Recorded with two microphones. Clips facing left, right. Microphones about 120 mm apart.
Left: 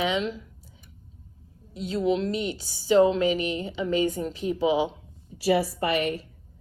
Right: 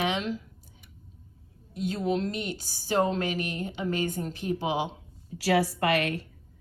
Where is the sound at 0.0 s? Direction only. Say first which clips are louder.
Left 2 dB; 55° right (ahead or behind).